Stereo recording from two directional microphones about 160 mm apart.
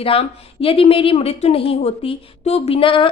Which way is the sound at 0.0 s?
35° left (ahead or behind).